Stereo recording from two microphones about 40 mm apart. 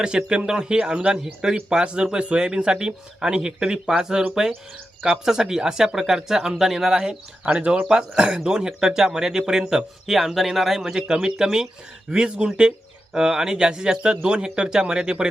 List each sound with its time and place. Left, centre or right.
0.0 s speech: right
5.2 s speech: centre